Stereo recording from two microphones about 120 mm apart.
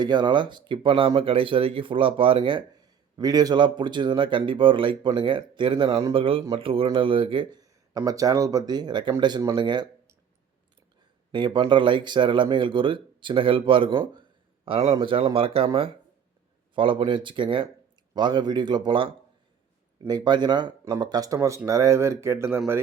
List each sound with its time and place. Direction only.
0.0 s speech: 40° right (ahead or behind)
3.2 s speech: 30° right (ahead or behind)
7.6 s speech: 30° right (ahead or behind)
11.3 s a man's voice: 40° right (ahead or behind); by 22.8 s 20° right (ahead or behind)